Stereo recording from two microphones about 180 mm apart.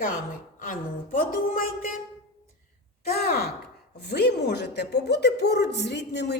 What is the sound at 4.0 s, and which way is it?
Speech, 65° left (ahead or behind).